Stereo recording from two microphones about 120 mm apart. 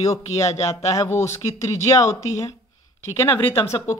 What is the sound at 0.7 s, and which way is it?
Speech, 25° left (ahead or behind).